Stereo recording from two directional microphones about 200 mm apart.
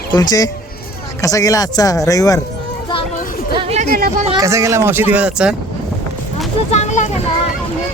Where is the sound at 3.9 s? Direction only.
45° right (ahead or behind).